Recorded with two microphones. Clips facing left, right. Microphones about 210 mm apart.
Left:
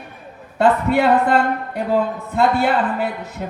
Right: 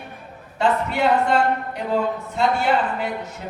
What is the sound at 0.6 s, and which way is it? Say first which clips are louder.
A man's voice: left 5 dB; 55° left (ahead or behind).